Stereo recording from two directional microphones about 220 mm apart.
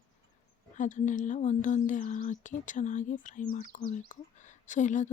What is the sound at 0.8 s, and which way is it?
Speech, 35° left (ahead or behind).